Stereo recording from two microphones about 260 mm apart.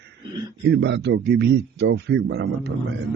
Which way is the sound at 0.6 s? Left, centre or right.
Right.